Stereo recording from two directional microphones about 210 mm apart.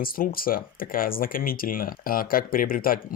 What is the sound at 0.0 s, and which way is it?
Speech, 45° left (ahead or behind).